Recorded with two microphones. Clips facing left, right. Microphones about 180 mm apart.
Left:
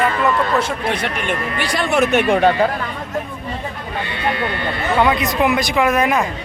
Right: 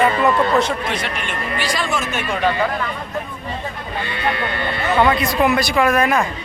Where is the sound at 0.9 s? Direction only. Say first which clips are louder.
Left 4 dB; 55° left (ahead or behind).